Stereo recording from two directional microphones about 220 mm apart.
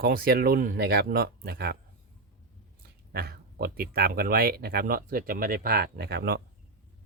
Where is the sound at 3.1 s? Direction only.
45° right (ahead or behind).